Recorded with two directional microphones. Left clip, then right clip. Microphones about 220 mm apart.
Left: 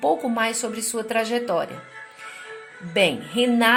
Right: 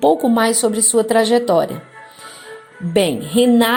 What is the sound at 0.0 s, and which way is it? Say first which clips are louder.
A woman's voice: right 7 dB; 30° right (ahead or behind).